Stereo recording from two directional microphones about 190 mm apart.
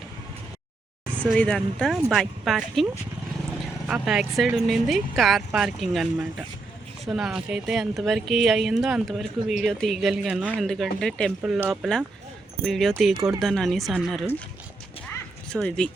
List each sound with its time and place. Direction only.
1.1 s a sound: 10° right (ahead or behind)
1.4 s speech: 5° left (ahead or behind)
3.8 s speech: 5° right (ahead or behind)
13.1 s speech: 20° right (ahead or behind)
13.4 s speech: centre (ahead or behind)
15.5 s speech: 5° left (ahead or behind)